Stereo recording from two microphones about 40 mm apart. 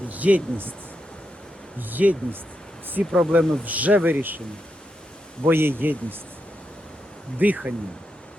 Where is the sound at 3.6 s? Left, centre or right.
Right.